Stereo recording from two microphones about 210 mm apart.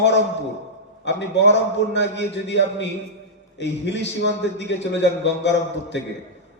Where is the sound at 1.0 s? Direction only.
55° left (ahead or behind).